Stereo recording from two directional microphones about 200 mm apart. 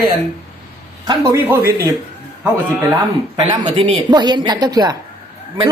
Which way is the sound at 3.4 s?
25° right (ahead or behind).